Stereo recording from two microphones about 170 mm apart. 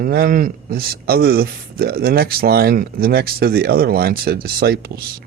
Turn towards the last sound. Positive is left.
turn(degrees=-65)  # may be behind; listen again after turning